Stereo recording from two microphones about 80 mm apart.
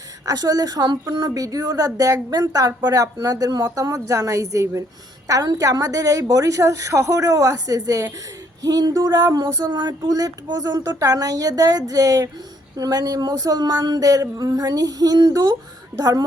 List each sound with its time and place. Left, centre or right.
0.3 s a woman's voice: right
1.3 s a woman's voice: right
8.6 s a sound: right
10.1 s a woman's voice: right